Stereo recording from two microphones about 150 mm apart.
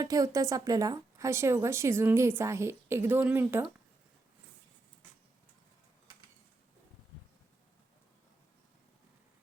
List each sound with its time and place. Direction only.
0.0 s speech: 25° right (ahead or behind)